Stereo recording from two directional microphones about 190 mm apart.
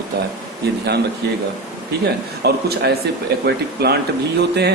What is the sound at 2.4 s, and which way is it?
Speech, 60° right (ahead or behind).